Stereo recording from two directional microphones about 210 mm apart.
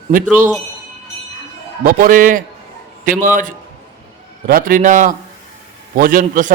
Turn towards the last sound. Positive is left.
turn(degrees=-40)  # may be behind; listen again after turning